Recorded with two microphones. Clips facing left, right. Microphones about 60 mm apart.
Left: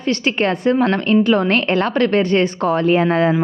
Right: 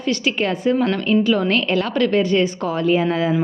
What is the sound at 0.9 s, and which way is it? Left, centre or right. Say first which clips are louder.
A woman's voice: left 3 dB; left.